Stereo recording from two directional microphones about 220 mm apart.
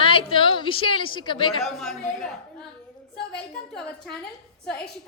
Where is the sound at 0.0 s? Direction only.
25° left (ahead or behind).